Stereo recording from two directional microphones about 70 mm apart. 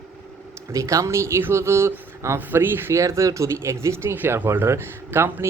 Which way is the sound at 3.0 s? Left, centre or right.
Right.